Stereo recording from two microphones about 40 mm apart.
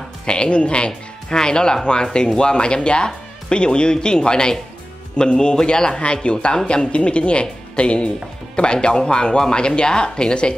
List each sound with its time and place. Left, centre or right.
0.3 s speech: left
6.9 s speech: left